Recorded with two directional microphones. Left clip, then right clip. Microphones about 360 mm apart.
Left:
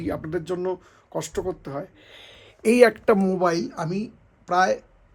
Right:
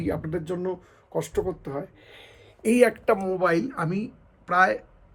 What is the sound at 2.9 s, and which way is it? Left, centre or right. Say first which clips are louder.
Speech: left 3 dB; left.